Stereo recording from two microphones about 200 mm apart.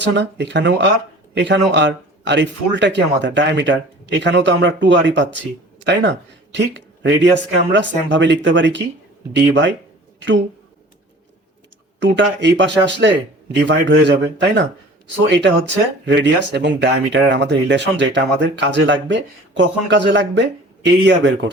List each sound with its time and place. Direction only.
0.0 s a man's voice: 60° right (ahead or behind)
11.9 s a man's voice: 65° right (ahead or behind)